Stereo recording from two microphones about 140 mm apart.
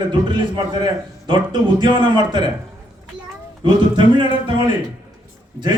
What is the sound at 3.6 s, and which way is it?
A man's voice, 35° right (ahead or behind).